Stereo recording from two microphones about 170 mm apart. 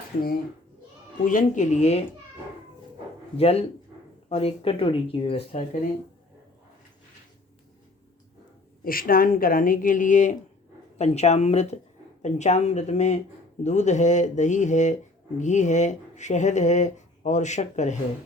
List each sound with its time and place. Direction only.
1.2 s speech: 50° left (ahead or behind)
3.3 s speech: 35° left (ahead or behind)
8.8 s speech: 60° left (ahead or behind)